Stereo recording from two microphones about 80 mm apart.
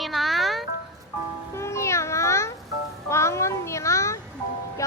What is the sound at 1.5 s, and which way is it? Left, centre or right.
A child's voice, left.